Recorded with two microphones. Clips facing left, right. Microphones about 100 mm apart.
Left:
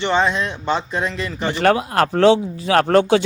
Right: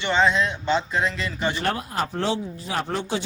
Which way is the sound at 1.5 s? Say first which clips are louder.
Left 9 dB; 90° left.